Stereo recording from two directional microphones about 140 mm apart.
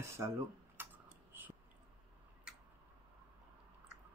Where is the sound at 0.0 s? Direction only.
20° right (ahead or behind).